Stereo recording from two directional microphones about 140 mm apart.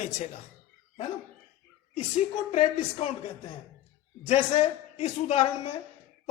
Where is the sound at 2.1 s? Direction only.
50° left (ahead or behind).